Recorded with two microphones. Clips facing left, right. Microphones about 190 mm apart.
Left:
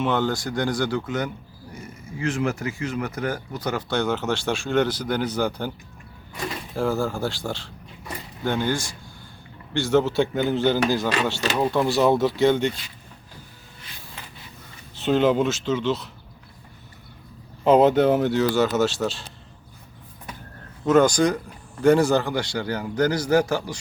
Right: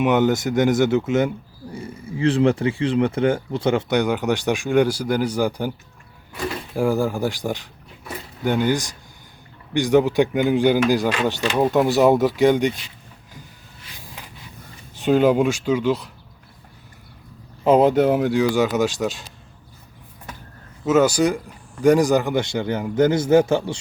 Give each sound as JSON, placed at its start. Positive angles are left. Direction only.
{"t": 0.0, "sound": "speech", "side_deg": -20}
{"t": 6.7, "sound": "speech", "side_deg": -15}
{"t": 14.9, "sound": "speech", "side_deg": -10}
{"t": 17.6, "sound": "speech", "side_deg": -10}
{"t": 20.8, "sound": "speech", "side_deg": -5}